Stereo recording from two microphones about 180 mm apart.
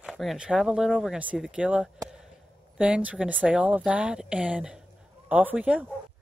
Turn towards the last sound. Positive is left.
turn(degrees=-5)  # may be behind; listen again after turning